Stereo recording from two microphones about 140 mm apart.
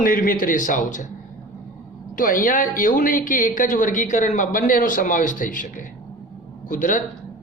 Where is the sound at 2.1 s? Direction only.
80° left.